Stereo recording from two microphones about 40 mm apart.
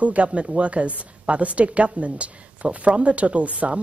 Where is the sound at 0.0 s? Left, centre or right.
Right.